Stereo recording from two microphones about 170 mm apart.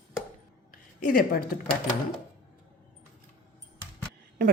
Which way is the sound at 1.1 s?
55° left (ahead or behind).